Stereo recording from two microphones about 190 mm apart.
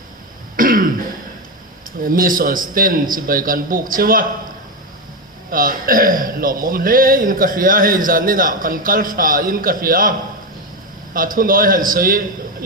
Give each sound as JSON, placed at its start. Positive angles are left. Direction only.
{"t": 0.5, "sound": "throat clearing", "side_deg": -45}
{"t": 2.0, "sound": "a man's voice", "side_deg": -45}
{"t": 5.5, "sound": "a man's voice", "side_deg": -50}